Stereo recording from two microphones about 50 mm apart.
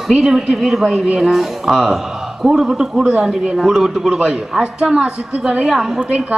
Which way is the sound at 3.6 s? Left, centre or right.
Centre.